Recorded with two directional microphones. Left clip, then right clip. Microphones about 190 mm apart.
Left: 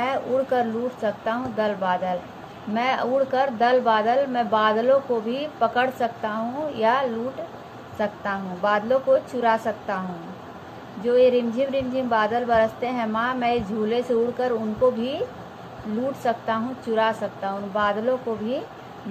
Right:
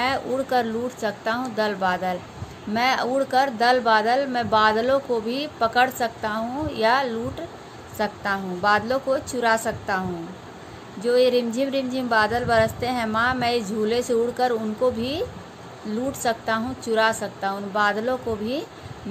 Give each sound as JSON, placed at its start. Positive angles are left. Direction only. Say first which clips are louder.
{"t": 0.0, "sound": "speech", "louder": "left 1 dB", "side_deg": -60}
{"t": 11.1, "sound": "speech", "louder": "left 1 dB", "side_deg": -70}
{"t": 16.3, "sound": "speech", "louder": "right 1 dB", "side_deg": -65}